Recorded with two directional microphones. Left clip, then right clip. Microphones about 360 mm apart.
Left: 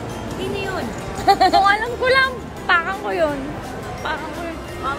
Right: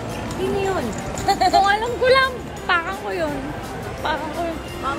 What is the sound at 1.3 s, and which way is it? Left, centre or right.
Speech, left.